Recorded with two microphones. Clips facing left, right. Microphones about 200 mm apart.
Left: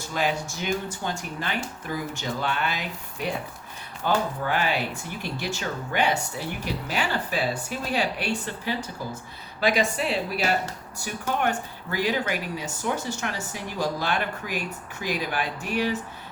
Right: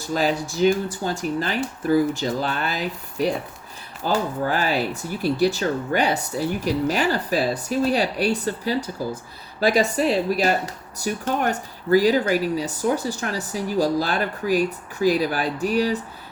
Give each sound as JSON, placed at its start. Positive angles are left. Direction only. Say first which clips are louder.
{"t": 0.1, "sound": "speech", "louder": "right 5 dB", "side_deg": -35}